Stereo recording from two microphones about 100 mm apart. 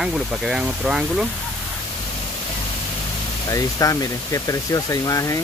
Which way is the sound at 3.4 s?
35° left (ahead or behind).